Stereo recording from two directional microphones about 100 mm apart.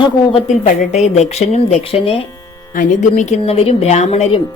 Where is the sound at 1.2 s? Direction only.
90° left; by 2.2 s 75° left (ahead or behind).